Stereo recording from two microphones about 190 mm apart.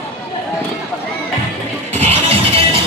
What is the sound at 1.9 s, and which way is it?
Music, 35° right (ahead or behind).